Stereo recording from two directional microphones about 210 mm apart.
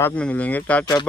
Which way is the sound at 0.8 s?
20° left (ahead or behind).